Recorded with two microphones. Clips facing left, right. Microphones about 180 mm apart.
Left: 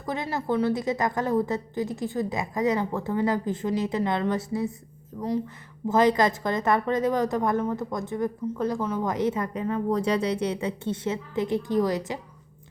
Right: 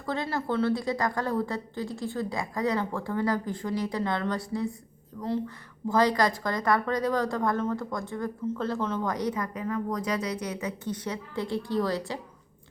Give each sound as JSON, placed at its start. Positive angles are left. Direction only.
{"t": 0.0, "sound": "a woman's voice", "side_deg": 20}
{"t": 9.0, "sound": "a woman's voice", "side_deg": 25}